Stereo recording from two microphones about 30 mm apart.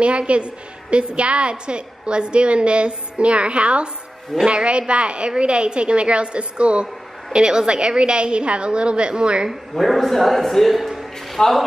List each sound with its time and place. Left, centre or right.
0.0 s a woman's voice: right
7.3 s a woman's voice: right
9.8 s a man's voice: centre